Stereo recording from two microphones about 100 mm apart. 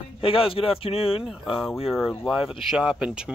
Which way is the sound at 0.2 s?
65° left (ahead or behind).